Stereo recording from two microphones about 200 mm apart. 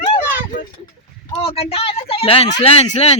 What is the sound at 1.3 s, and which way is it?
Speech, 30° left (ahead or behind).